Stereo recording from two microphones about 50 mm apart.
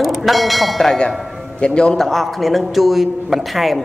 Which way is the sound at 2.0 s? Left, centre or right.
Centre.